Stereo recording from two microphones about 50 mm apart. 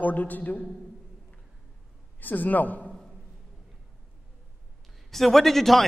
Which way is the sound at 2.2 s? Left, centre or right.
Left.